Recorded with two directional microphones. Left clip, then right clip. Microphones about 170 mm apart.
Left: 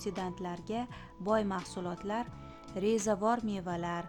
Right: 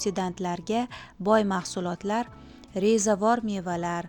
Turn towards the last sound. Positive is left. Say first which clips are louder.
# right 7 dB
turn(degrees=-25)  # may be behind; listen again after turning